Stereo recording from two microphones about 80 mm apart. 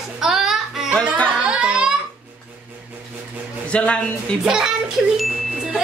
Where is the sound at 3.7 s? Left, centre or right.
Centre.